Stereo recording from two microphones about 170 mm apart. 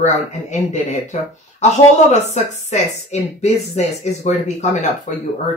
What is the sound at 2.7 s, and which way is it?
Speech, 40° left (ahead or behind).